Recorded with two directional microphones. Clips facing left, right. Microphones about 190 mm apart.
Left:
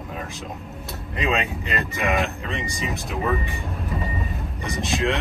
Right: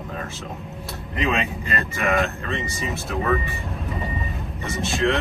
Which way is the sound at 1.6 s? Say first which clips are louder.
Even; 15° left (ahead or behind).